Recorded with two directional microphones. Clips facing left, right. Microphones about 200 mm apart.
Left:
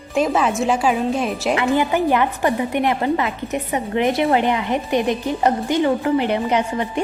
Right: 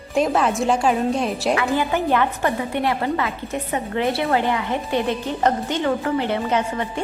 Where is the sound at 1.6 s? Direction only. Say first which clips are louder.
Left 3 dB; 15° left (ahead or behind).